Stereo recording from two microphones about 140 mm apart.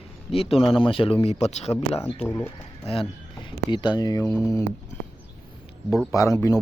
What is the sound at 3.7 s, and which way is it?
Speech, 30° left (ahead or behind).